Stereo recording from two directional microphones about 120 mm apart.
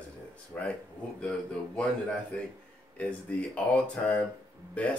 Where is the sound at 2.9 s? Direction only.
10° left (ahead or behind).